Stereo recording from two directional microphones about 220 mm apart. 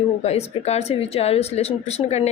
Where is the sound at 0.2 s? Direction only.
30° left (ahead or behind).